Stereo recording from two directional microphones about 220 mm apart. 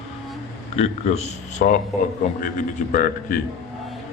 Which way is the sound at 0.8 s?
30° left (ahead or behind).